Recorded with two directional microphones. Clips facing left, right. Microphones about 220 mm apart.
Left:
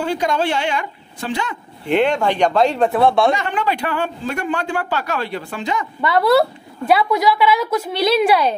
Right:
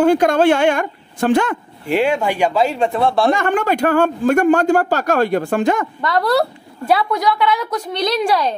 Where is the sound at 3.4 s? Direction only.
50° right (ahead or behind).